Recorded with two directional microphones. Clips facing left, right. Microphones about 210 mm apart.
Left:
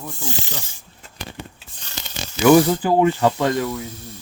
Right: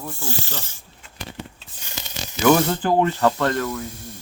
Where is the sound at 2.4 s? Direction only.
10° left (ahead or behind).